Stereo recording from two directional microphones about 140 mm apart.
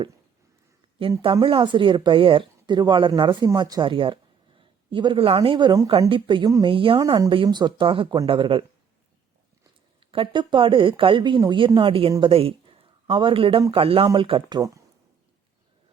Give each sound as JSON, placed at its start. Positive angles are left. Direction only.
{"t": 1.2, "sound": "speech", "side_deg": -40}
{"t": 5.9, "sound": "speech", "side_deg": -40}
{"t": 10.0, "sound": "speech", "side_deg": -40}